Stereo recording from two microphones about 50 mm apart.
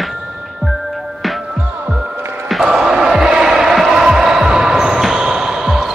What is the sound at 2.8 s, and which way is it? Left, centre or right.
Music, centre.